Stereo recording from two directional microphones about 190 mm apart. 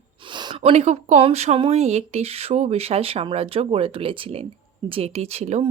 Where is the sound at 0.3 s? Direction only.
25° right (ahead or behind).